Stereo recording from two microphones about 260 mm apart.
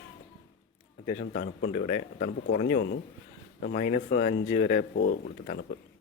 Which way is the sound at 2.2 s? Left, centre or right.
Left.